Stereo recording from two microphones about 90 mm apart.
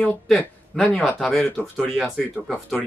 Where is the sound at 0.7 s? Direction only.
Centre (ahead or behind).